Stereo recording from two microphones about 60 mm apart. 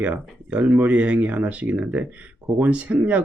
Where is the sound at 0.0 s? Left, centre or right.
Right.